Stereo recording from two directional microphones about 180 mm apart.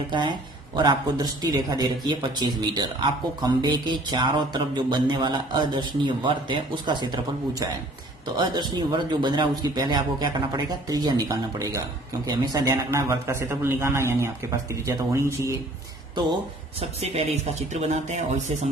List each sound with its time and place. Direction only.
0.1 s a man's voice: 25° right (ahead or behind)
17.0 s speech: 35° right (ahead or behind)